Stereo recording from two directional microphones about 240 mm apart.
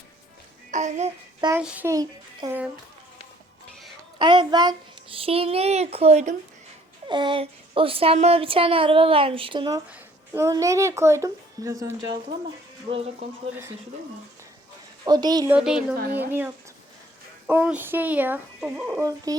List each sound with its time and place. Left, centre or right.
0.7 s child singing: right
1.5 s speech: centre
4.2 s a woman's voice: centre
13.5 s speech: centre
15.0 s speech: centre
15.5 s speech: centre